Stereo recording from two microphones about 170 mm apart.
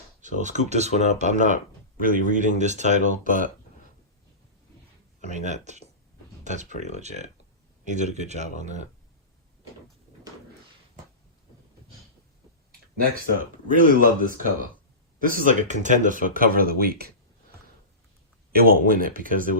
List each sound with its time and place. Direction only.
0.2 s speech: 45° right (ahead or behind)
5.3 s speech: 45° right (ahead or behind)
13.0 s speech: 50° right (ahead or behind)
16.3 s speech: 60° right (ahead or behind)
18.5 s speech: 60° right (ahead or behind)